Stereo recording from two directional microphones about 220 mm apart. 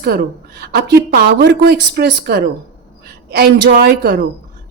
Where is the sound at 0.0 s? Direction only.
45° right (ahead or behind).